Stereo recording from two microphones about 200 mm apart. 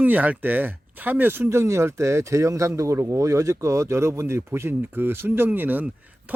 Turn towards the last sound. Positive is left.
turn(degrees=-10)  # may be behind; listen again after turning